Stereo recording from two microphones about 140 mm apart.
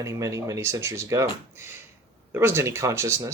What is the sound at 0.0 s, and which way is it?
Speech, 20° right (ahead or behind).